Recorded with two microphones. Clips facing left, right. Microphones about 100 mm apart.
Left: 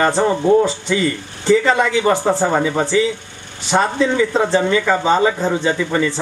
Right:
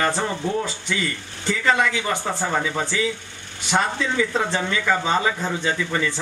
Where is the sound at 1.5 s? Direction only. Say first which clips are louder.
Left 7 dB; 30° left (ahead or behind).